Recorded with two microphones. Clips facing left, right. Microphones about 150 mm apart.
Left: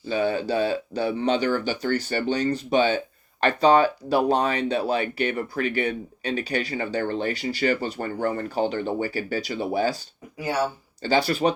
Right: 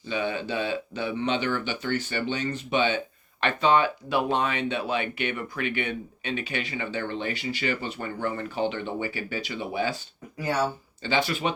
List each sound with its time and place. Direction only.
0.1 s speech: 40° left (ahead or behind)
10.3 s speech: 10° left (ahead or behind)
11.0 s speech: 40° left (ahead or behind)